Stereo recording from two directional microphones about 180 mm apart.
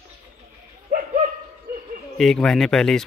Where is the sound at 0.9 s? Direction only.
50° right (ahead or behind).